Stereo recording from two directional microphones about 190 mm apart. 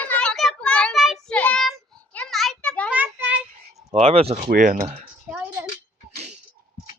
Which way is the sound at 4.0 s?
30° right (ahead or behind).